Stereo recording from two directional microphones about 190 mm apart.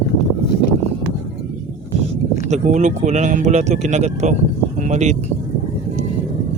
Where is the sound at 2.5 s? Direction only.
40° right (ahead or behind).